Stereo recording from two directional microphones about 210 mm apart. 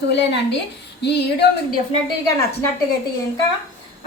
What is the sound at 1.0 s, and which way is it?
Speech, 55° left (ahead or behind).